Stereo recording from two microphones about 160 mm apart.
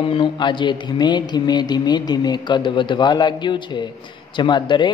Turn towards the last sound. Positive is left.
turn(degrees=30)  # may be behind; listen again after turning